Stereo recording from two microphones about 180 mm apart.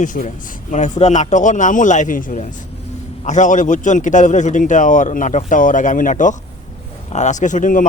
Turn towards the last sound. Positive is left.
turn(degrees=45)  # may be behind; listen again after turning